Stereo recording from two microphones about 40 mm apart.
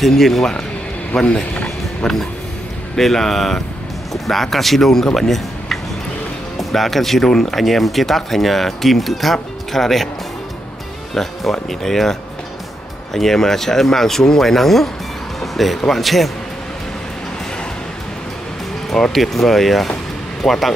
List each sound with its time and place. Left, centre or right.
0.0 s speech: centre
0.4 s speech: centre
1.3 s music: left
3.0 s speech: centre
11.2 s speech: centre
19.1 s speech: centre